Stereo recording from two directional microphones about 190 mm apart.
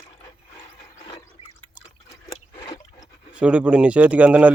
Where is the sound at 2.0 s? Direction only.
20° left (ahead or behind).